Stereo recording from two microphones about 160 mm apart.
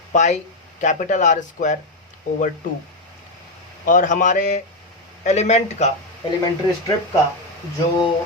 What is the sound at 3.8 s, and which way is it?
Speech, 55° left (ahead or behind).